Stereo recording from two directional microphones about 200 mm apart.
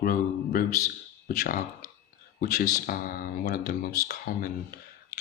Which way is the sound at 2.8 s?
45° left (ahead or behind).